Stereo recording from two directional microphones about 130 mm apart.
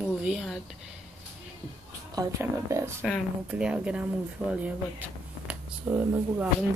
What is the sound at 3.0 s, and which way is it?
Speech, centre (ahead or behind).